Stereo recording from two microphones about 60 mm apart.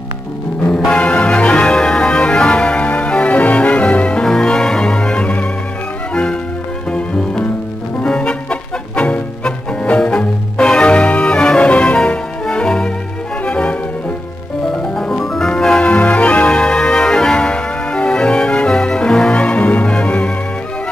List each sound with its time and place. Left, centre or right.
0.7 s music: centre
6.9 s music: centre
14.8 s music: centre
15.8 s organ: left